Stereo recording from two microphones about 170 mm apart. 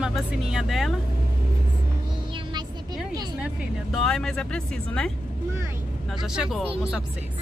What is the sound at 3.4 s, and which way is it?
Speech, centre (ahead or behind).